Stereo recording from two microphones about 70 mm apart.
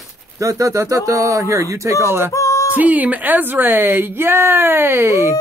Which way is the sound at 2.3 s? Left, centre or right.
Left.